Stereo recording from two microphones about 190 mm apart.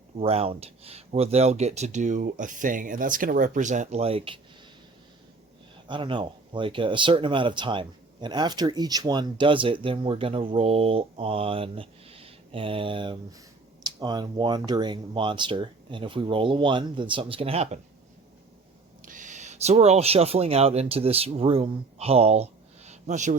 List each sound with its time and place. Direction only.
0.2 s speech: 35° right (ahead or behind)
5.9 s speech: 25° right (ahead or behind)
19.0 s speech: 40° right (ahead or behind)